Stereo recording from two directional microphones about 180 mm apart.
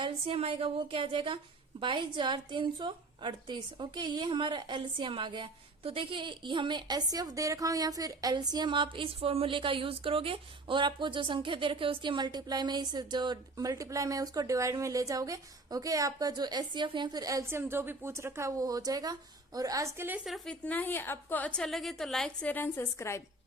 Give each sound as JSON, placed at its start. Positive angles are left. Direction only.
{"t": 0.0, "sound": "a woman's voice", "side_deg": -30}